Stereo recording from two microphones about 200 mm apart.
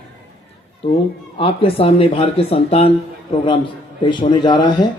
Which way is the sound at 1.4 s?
30° left (ahead or behind).